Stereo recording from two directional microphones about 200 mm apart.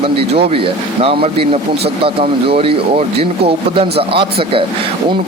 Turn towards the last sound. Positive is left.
turn(degrees=-25)  # may be behind; listen again after turning